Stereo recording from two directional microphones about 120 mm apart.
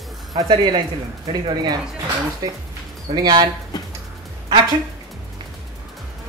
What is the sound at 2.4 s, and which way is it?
Speech, 35° right (ahead or behind).